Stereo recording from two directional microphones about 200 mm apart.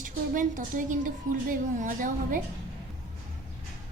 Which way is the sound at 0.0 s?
40° right (ahead or behind).